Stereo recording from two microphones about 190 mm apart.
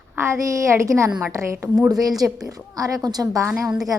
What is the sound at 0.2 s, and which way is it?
A woman's voice, 15° right (ahead or behind).